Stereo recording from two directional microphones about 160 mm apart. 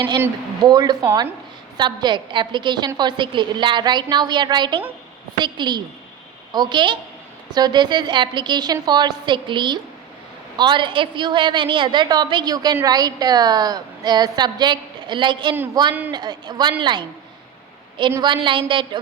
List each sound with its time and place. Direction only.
0.0 s a woman's voice: 20° right (ahead or behind)
18.1 s a woman's voice: 30° right (ahead or behind)